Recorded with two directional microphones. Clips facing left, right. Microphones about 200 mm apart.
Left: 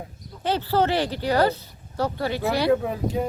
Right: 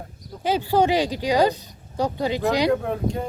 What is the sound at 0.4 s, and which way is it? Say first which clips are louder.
Speech: right 2 dB; 10° right (ahead or behind).